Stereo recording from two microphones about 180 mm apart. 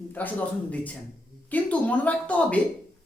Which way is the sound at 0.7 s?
10° left (ahead or behind).